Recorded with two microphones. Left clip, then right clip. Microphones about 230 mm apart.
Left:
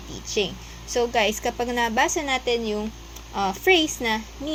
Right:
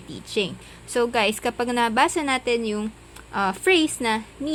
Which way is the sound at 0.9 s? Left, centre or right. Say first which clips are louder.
Even; right.